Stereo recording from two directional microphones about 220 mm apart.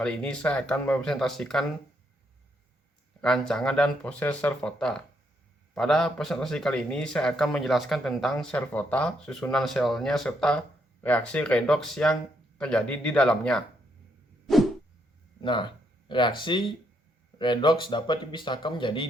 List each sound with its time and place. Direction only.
0.0 s a man's voice: 5° left (ahead or behind)
3.2 s a man's voice: 5° left (ahead or behind)
14.4 s a sound: centre (ahead or behind)
15.4 s speech: 20° left (ahead or behind)